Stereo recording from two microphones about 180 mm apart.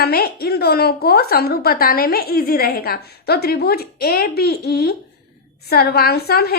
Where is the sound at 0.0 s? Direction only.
60° left (ahead or behind).